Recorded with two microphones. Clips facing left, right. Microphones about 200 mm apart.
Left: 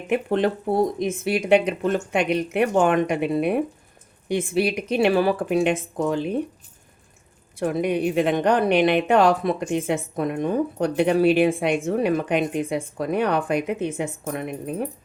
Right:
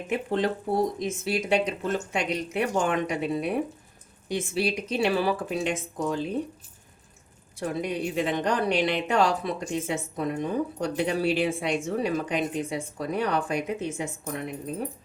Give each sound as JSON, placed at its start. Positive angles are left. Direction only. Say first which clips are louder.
{"t": 0.1, "sound": "a woman's voice", "louder": "left 5 dB", "side_deg": 60}
{"t": 7.6, "sound": "a woman's voice", "louder": "left 7 dB", "side_deg": 60}